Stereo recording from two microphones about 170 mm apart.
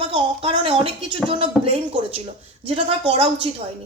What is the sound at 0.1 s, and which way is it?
Speech, 30° right (ahead or behind).